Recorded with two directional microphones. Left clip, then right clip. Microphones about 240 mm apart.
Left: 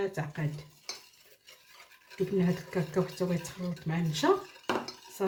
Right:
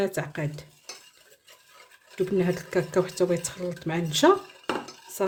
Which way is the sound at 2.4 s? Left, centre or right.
Right.